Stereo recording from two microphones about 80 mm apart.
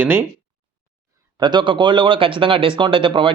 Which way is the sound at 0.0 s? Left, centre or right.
Right.